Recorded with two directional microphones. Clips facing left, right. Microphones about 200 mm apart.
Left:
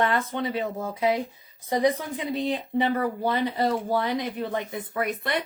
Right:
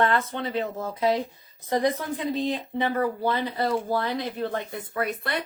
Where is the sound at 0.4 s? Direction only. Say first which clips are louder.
Even; 10° left (ahead or behind).